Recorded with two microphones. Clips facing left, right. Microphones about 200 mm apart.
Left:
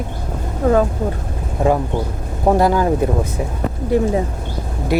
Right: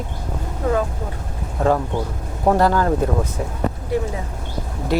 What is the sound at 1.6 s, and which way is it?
Speech, 10° left (ahead or behind).